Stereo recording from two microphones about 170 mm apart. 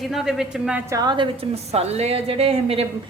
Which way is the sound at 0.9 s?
25° right (ahead or behind).